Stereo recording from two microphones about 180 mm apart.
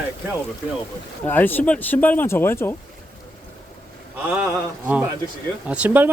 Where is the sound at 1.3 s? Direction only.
10° left (ahead or behind).